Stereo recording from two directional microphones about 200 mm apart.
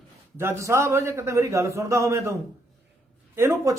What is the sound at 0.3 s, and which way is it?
Speech, 15° right (ahead or behind).